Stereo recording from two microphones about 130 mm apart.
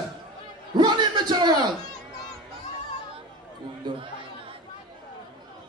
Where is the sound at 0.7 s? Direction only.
35° right (ahead or behind).